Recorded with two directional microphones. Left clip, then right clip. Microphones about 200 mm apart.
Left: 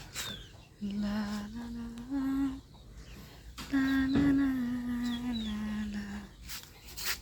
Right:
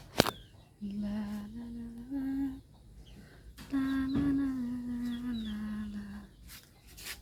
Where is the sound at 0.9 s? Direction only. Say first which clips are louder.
Left 3 dB; 15° right (ahead or behind).